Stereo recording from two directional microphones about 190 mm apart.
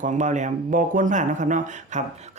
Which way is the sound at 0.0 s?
40° right (ahead or behind).